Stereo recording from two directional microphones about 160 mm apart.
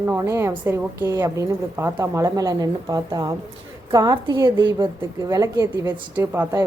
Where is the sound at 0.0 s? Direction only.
15° right (ahead or behind).